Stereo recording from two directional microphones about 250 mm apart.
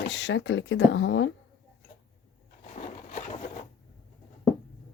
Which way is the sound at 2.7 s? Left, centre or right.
Left.